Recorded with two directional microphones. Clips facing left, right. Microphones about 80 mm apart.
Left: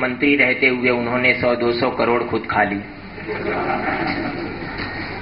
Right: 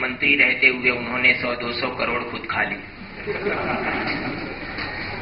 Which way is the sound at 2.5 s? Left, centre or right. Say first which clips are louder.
Left 7 dB; left.